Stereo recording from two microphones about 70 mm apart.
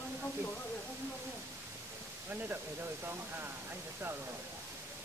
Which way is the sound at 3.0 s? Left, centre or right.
Right.